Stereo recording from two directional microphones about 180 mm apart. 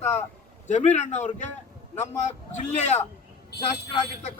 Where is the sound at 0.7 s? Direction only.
40° left (ahead or behind).